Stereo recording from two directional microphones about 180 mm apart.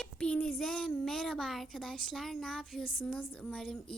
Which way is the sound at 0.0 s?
5° left (ahead or behind).